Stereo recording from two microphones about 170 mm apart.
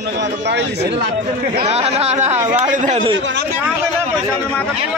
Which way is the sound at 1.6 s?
40° right (ahead or behind).